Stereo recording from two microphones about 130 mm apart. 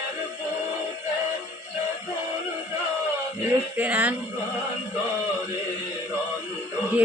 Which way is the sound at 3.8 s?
10° right (ahead or behind).